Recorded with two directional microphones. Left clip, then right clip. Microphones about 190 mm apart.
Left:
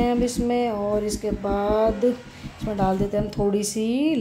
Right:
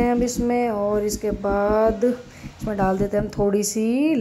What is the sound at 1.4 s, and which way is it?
Speech, 20° right (ahead or behind).